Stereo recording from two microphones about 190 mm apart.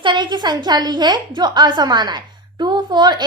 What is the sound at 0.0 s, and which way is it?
A woman's voice, 25° right (ahead or behind).